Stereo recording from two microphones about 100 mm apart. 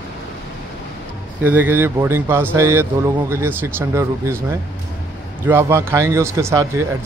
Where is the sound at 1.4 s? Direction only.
20° right (ahead or behind).